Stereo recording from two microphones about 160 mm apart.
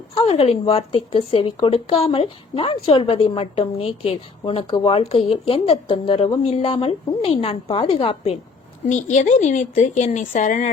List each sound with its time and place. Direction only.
0.1 s a woman's voice: 40° left (ahead or behind)
8.9 s speech: 50° left (ahead or behind)